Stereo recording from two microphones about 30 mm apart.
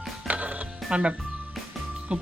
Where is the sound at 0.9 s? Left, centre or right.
Right.